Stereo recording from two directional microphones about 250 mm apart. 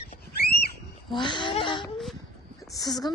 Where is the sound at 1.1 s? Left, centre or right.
Centre.